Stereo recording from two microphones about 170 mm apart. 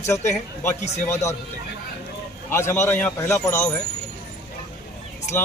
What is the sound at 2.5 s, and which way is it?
A man's voice, 15° left (ahead or behind).